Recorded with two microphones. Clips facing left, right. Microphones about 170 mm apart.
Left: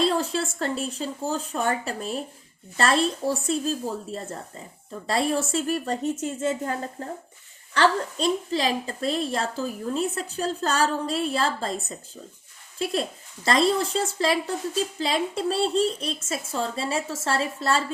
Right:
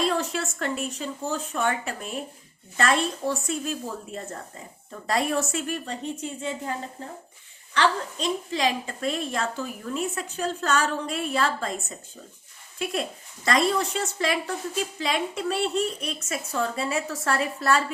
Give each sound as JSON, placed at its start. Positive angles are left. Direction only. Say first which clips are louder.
{"t": 0.0, "sound": "a woman's voice", "louder": "left 2 dB", "side_deg": 30}